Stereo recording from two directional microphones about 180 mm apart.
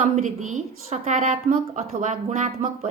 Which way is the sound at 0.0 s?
40° right (ahead or behind).